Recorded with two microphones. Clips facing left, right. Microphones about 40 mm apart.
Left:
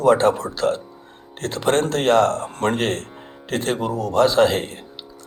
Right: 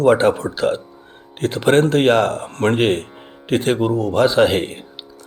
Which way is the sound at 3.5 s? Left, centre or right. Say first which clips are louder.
Right 5 dB; right.